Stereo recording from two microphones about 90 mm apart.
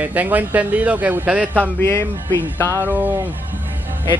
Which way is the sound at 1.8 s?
30° left (ahead or behind).